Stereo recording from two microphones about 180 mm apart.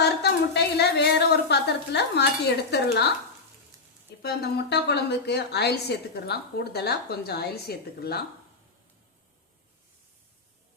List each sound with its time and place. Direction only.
0.0 s a woman's voice: 65° left (ahead or behind)
4.2 s a woman's voice: 60° left (ahead or behind)